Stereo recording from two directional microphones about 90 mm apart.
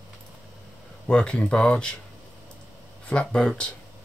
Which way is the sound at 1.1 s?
10° left (ahead or behind).